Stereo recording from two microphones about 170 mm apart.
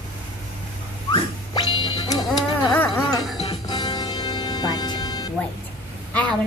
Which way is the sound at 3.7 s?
25° left (ahead or behind).